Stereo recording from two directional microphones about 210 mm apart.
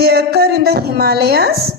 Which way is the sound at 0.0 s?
50° right (ahead or behind).